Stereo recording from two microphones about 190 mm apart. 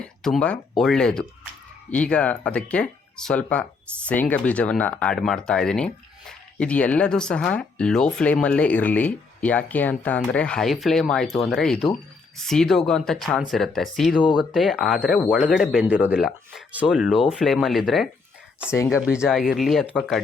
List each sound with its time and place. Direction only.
0.0 s a sound: 5° left (ahead or behind)
0.8 s speech: centre (ahead or behind)
14.2 s speech: 25° left (ahead or behind)
14.5 s speech: centre (ahead or behind)